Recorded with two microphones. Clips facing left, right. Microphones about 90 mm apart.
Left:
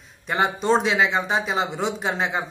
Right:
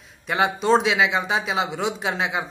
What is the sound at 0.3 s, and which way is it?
A man's voice, centre (ahead or behind).